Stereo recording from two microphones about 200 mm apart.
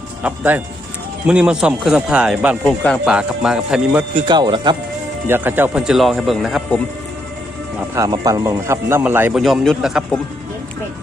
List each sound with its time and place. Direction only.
0.2 s a man's voice: 10° right (ahead or behind)
4.1 s speech: 20° right (ahead or behind)
5.2 s speech: 10° right (ahead or behind)
7.9 s a man's voice: 20° right (ahead or behind); by 10.2 s centre (ahead or behind)